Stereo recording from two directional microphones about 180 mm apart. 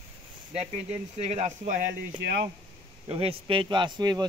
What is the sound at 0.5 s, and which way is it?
Speech, 40° right (ahead or behind).